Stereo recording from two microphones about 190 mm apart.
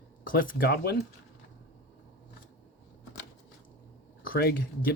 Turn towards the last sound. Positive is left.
turn(degrees=55)  # may be behind; listen again after turning